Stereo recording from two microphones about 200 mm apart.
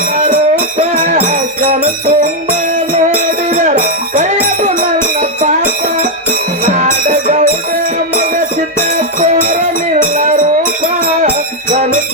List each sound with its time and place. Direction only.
0.9 s music: 40° right (ahead or behind)
3.5 s music: 40° right (ahead or behind)
6.7 s music: 40° right (ahead or behind)
9.2 s music: 40° right (ahead or behind)